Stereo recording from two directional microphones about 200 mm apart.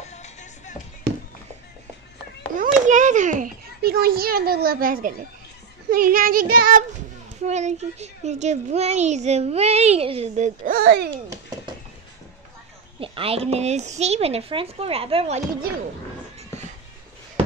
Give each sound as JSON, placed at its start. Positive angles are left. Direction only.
{"t": 0.0, "sound": "music", "side_deg": 35}
{"t": 2.5, "sound": "children playing", "side_deg": -40}
{"t": 5.9, "sound": "speech", "side_deg": -45}
{"t": 7.4, "sound": "a child's voice", "side_deg": -35}
{"t": 13.0, "sound": "speech", "side_deg": -25}